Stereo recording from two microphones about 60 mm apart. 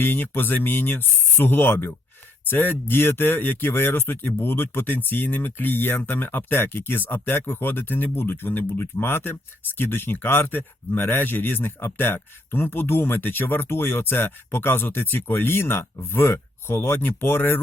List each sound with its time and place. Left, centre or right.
0.0 s speech: left